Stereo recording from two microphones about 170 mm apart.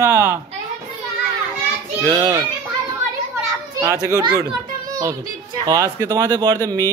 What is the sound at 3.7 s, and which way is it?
A child's voice, 20° right (ahead or behind).